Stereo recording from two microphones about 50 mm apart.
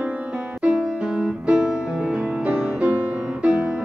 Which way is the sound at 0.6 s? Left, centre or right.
Centre.